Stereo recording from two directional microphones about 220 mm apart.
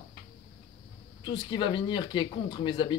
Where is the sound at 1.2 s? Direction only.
20° left (ahead or behind).